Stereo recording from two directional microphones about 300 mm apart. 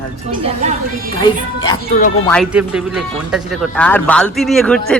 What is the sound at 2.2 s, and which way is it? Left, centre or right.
A man's voice, centre.